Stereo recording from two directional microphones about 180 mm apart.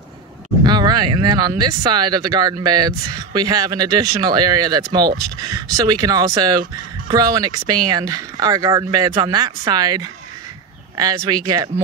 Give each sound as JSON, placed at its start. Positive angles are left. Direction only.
{"t": 0.7, "sound": "speech", "side_deg": -25}